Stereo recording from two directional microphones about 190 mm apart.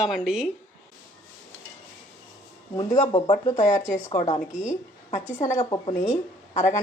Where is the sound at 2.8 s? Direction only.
40° left (ahead or behind).